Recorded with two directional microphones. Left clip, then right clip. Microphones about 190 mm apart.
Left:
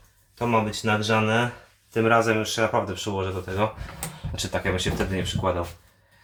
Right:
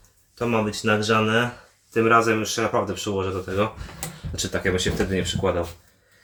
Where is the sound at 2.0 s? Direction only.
20° left (ahead or behind).